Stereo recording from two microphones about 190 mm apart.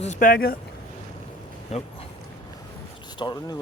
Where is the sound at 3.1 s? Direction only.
20° left (ahead or behind).